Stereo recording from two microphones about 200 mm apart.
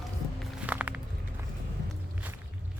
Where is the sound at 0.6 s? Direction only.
5° right (ahead or behind).